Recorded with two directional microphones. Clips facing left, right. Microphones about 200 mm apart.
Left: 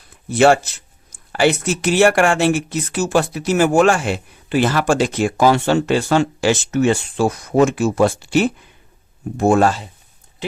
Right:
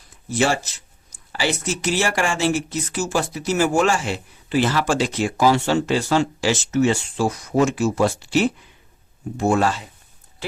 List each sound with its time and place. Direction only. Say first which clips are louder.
0.1 s speech: left 8 dB; 60° left (ahead or behind)